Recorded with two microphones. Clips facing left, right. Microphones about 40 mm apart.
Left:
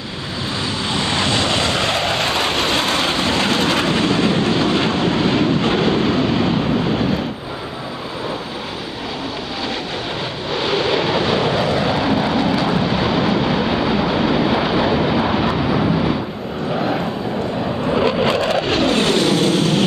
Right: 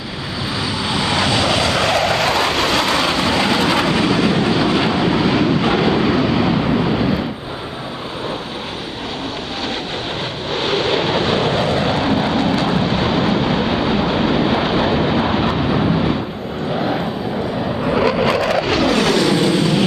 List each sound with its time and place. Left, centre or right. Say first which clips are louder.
0.8 s vehicle: right 2 dB; centre
2.4 s vehicle: right 2 dB; left
3.3 s vehicle: right 1 dB; centre
10.5 s vehicle: even; centre
18.2 s vehicle: right 1 dB; left